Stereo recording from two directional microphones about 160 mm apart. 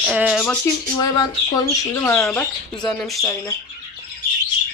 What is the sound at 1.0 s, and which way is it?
Speech, 25° left (ahead or behind).